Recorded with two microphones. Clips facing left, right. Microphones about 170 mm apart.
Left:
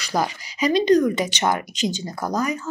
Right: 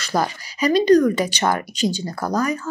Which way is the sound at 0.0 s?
15° left (ahead or behind).